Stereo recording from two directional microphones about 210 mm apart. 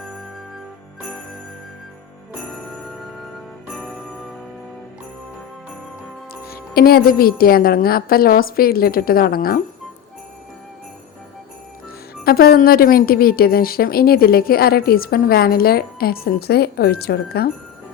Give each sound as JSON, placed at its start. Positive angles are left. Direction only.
{"t": 2.8, "sound": "jingle bell", "side_deg": 0}
{"t": 6.5, "sound": "a woman's voice", "side_deg": 45}
{"t": 12.2, "sound": "a woman's voice", "side_deg": 45}